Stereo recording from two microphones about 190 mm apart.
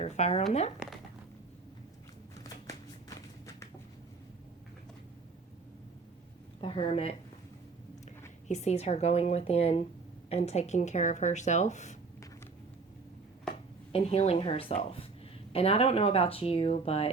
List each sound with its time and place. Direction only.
0.0 s speech: 35° left (ahead or behind)
3.2 s a sound: 15° left (ahead or behind)
6.6 s speech: 25° left (ahead or behind)
8.4 s speech: 35° left (ahead or behind)
13.9 s speech: 35° left (ahead or behind)